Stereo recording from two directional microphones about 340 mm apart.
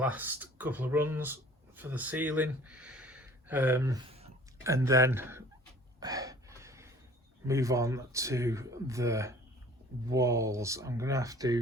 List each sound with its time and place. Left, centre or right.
0.0 s speech: centre
6.0 s gasp: centre
7.4 s speech: centre